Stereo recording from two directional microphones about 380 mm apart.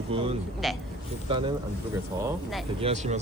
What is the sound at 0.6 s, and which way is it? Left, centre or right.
Speech, centre.